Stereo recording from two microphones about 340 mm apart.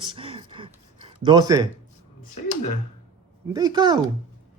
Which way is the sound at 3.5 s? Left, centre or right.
Centre.